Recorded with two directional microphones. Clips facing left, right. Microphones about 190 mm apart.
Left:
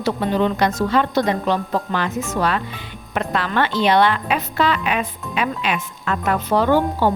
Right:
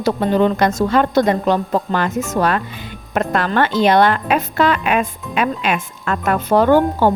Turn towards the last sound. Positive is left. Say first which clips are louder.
# right 4 dB
turn(degrees=-50)  # may be behind; listen again after turning